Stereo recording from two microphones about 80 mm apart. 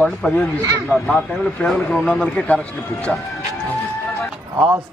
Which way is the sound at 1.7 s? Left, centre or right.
Centre.